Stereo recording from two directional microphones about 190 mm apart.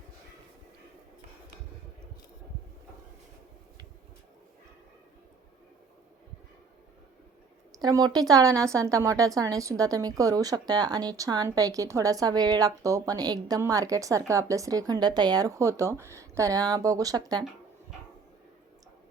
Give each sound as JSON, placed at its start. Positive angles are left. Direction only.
{"t": 7.7, "sound": "a woman's voice", "side_deg": -20}